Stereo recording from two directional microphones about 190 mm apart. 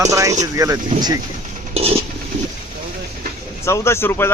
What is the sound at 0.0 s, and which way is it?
Speech, 15° right (ahead or behind).